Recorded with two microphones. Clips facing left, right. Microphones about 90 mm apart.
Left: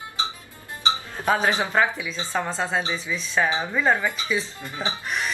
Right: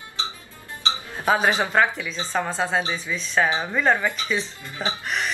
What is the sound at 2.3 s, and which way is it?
Speech, centre (ahead or behind).